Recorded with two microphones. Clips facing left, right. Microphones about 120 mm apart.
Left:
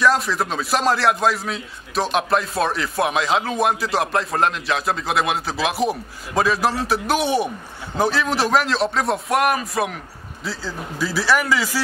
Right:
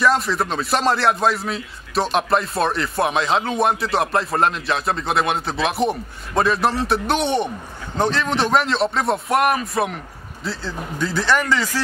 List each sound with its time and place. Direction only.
0.0 s speech: centre (ahead or behind)